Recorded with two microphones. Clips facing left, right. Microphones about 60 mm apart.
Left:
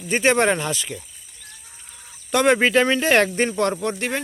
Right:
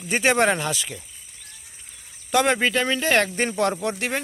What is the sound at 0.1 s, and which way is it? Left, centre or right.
Speech, centre.